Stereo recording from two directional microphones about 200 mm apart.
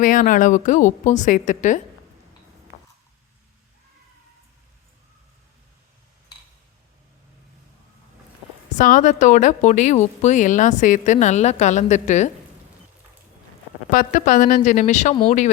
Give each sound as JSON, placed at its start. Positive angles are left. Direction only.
{"t": 0.0, "sound": "a woman's voice", "side_deg": 40}
{"t": 8.7, "sound": "a woman's voice", "side_deg": 40}
{"t": 13.9, "sound": "a woman's voice", "side_deg": 40}
{"t": 15.1, "sound": "speech", "side_deg": 25}